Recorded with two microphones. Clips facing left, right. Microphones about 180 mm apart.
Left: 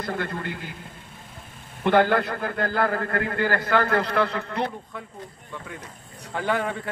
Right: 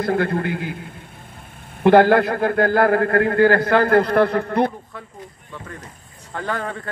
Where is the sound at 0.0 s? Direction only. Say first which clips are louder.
Right 9 dB; 55° right (ahead or behind).